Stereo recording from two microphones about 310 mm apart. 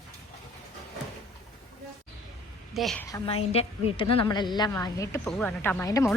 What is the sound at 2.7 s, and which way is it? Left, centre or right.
A woman's voice, centre.